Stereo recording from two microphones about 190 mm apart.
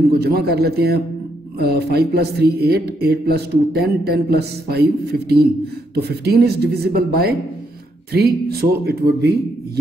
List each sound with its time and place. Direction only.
0.2 s speech: 55° right (ahead or behind)